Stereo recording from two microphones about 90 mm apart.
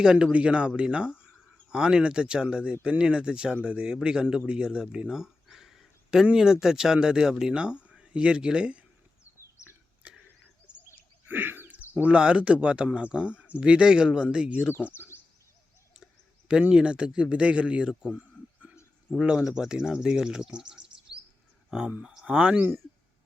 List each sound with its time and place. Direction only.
0.0 s speech: 10° right (ahead or behind)
9.2 s a sound: 30° left (ahead or behind)
11.3 s a sound: 20° right (ahead or behind)
11.9 s speech: 10° right (ahead or behind)
14.9 s bird: 25° left (ahead or behind)
16.5 s speech: 10° right (ahead or behind)
19.2 s speech: 10° right (ahead or behind)